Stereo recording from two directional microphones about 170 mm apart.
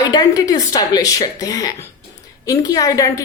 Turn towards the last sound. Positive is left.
turn(degrees=20)  # may be behind; listen again after turning